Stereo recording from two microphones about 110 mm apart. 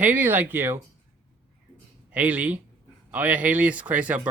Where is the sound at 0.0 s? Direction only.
15° right (ahead or behind).